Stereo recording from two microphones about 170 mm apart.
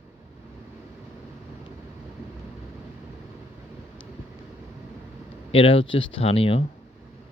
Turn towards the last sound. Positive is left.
turn(degrees=35)  # may be behind; listen again after turning